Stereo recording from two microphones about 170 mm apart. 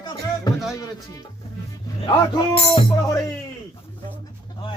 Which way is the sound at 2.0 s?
35° left (ahead or behind).